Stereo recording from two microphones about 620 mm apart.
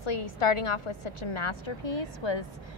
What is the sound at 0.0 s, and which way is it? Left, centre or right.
A woman's voice, left.